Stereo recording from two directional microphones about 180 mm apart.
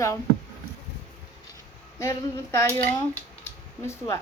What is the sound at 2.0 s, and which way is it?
Speech, 15° left (ahead or behind).